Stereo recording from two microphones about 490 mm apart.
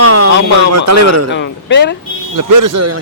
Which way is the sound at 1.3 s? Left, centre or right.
Left.